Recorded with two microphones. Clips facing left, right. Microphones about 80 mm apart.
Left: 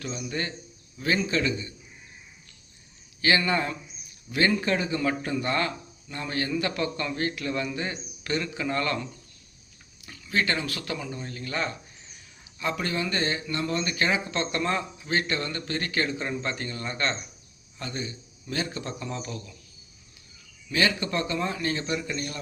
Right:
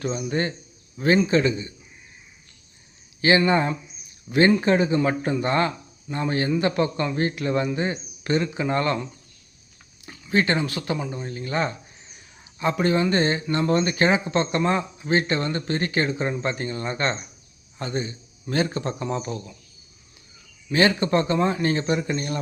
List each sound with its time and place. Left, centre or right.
0.0 s speech: right
3.2 s speech: right
20.7 s speech: right